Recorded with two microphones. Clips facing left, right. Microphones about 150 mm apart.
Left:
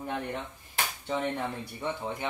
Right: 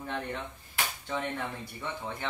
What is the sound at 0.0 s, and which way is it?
Speech, 15° left (ahead or behind).